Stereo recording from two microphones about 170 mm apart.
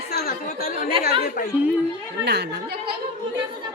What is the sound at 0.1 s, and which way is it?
Chatter, 65° left (ahead or behind).